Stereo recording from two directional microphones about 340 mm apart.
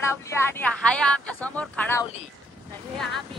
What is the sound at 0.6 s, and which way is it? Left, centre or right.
A man's voice, centre.